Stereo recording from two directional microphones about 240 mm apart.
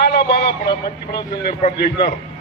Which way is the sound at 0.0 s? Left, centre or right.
Left.